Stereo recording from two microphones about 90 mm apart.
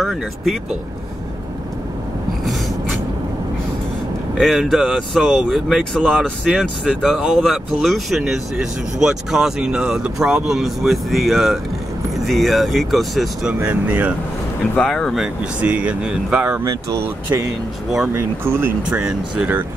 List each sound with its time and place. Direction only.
0.0 s speech: centre (ahead or behind)
4.4 s speech: centre (ahead or behind)
6.5 s speech: 10° right (ahead or behind)
13.7 s speech: 20° right (ahead or behind)
14.8 s speech: 5° left (ahead or behind)
15.6 s speech: 15° right (ahead or behind)
18.0 s speech: 25° right (ahead or behind)
18.9 s speech: 10° right (ahead or behind)